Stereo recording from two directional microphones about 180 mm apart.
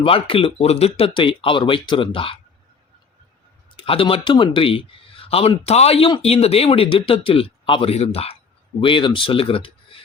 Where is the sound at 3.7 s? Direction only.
30° left (ahead or behind).